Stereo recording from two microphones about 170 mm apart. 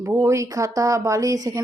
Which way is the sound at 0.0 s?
15° right (ahead or behind).